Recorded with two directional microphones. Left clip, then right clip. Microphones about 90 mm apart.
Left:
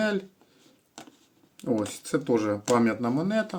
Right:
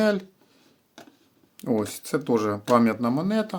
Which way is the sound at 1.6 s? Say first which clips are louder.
Right 2 dB; 45° right (ahead or behind).